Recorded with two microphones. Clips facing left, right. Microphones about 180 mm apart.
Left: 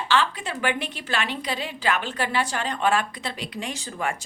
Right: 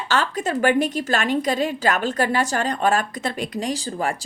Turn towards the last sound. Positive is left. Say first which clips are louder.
# right 5 dB
turn(degrees=-35)  # may be behind; listen again after turning